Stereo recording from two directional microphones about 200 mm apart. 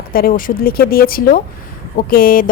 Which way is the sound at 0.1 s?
45° left (ahead or behind).